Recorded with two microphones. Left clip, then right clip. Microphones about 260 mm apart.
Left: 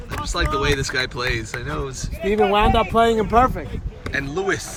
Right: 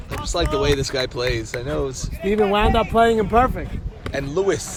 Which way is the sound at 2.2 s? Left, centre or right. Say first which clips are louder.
Left 1 dB; left.